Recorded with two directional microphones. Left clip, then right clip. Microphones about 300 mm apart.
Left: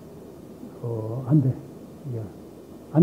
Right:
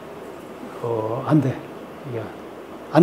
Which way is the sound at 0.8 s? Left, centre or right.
Centre.